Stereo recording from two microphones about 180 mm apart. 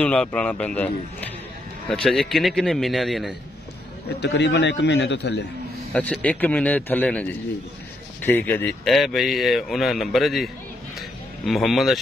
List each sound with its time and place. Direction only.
0.0 s a man's voice: 5° left (ahead or behind)
4.2 s a man's voice: 75° left (ahead or behind)
5.9 s a man's voice: 5° left (ahead or behind)